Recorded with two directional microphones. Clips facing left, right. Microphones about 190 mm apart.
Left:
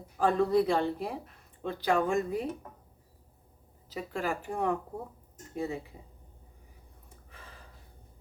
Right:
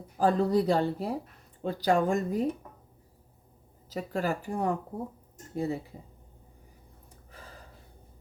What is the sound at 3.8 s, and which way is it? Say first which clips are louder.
Speech: right 3 dB; 40° right (ahead or behind).